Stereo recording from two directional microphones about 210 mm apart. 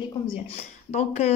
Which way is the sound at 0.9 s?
30° left (ahead or behind).